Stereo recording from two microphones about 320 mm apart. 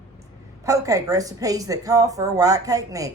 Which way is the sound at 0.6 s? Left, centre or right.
Centre.